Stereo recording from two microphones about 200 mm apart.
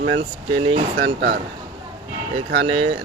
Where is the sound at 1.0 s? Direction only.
60° right (ahead or behind).